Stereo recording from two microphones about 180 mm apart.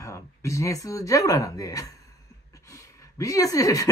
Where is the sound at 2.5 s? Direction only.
15° left (ahead or behind).